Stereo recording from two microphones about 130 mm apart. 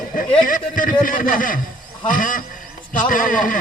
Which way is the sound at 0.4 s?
90° left.